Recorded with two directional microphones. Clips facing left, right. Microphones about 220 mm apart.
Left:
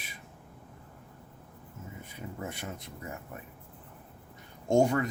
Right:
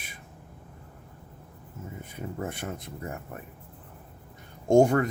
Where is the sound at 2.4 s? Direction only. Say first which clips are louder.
Right 5 dB; 50° right (ahead or behind).